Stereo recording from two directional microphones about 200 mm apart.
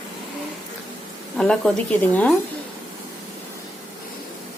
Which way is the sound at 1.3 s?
Centre (ahead or behind).